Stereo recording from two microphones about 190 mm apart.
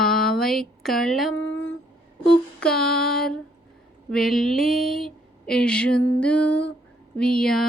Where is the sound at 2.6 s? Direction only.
5° left (ahead or behind).